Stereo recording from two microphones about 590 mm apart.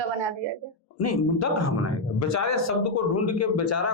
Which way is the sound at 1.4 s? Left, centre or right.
Left.